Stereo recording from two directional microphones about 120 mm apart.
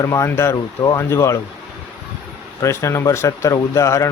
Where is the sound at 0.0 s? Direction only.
25° left (ahead or behind).